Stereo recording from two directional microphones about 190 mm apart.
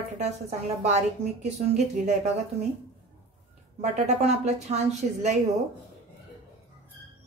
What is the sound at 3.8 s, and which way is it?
Speech, 35° right (ahead or behind).